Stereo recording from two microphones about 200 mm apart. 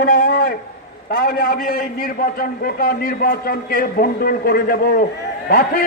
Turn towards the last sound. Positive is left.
turn(degrees=50)  # may be behind; listen again after turning